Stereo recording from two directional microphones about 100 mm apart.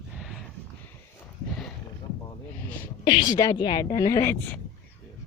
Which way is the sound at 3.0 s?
55° left (ahead or behind).